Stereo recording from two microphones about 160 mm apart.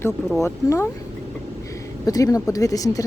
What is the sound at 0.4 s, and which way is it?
Speech, 15° left (ahead or behind).